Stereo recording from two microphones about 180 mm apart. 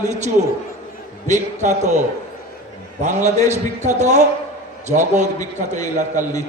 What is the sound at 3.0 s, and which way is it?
A man's voice, 40° right (ahead or behind).